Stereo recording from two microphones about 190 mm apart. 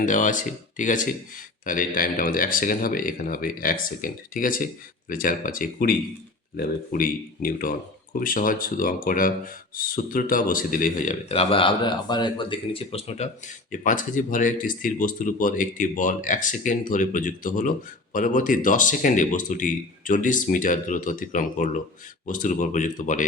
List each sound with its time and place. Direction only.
0.0 s speech: 45° left (ahead or behind)